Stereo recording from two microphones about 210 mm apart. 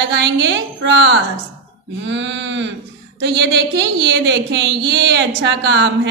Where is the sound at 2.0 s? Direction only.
60° right (ahead or behind).